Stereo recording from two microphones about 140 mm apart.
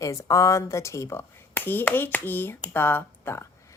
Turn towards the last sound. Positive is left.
turn(degrees=20)  # may be behind; listen again after turning